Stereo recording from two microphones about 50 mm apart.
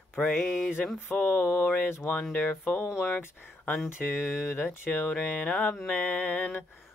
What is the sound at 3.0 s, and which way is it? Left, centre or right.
Speech, left.